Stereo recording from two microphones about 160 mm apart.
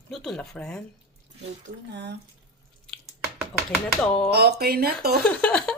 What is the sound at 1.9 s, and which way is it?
Speech, 90° right.